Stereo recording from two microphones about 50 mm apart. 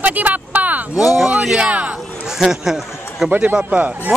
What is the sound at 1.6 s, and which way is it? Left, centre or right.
Speech, right.